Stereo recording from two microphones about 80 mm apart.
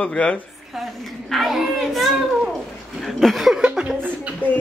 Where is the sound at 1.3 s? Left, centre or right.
Centre.